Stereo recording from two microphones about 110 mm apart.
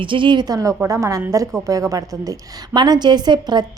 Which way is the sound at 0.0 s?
50° right (ahead or behind).